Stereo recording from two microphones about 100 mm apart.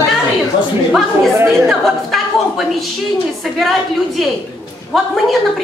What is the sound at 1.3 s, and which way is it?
Speech, 25° right (ahead or behind).